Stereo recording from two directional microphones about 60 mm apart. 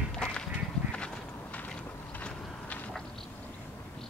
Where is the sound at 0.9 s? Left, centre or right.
Centre.